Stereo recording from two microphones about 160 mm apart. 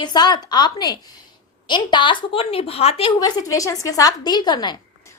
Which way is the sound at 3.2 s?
25° left (ahead or behind).